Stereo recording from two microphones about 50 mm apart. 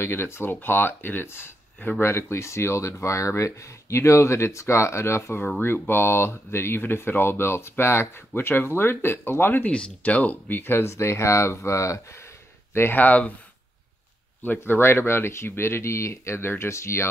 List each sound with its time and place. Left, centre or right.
0.0 s speech: left
1.8 s speech: left
2.0 s speech: left
5.6 s speech: left
9.7 s speech: left
10.5 s speech: left
12.9 s speech: left
14.4 s speech: left